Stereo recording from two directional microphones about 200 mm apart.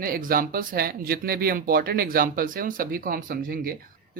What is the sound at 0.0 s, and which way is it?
Speech, 45° right (ahead or behind).